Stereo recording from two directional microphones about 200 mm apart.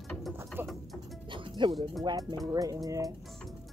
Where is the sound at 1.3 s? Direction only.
25° right (ahead or behind).